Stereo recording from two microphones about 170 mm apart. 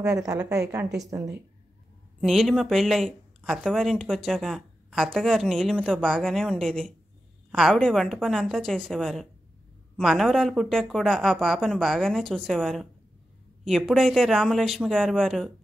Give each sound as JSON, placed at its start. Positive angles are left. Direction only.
{"t": 0.2, "sound": "a woman's voice", "side_deg": -20}
{"t": 2.1, "sound": "speech", "side_deg": 0}